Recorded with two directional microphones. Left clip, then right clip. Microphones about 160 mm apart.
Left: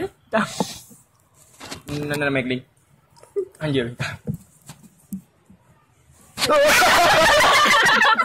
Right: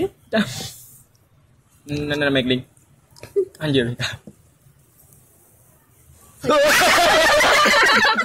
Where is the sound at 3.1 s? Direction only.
30° right (ahead or behind).